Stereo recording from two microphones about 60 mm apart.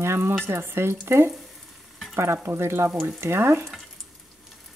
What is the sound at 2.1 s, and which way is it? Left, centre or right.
Speech, right.